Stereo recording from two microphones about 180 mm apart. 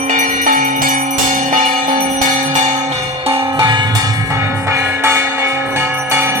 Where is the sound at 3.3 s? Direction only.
25° right (ahead or behind).